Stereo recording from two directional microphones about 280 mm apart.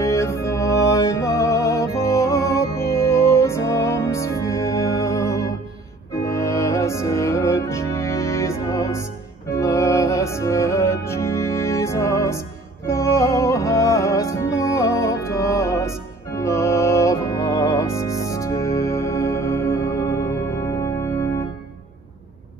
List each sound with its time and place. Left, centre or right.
0.0 s music: centre